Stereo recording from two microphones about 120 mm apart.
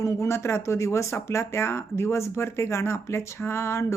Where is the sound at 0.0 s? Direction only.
25° left (ahead or behind).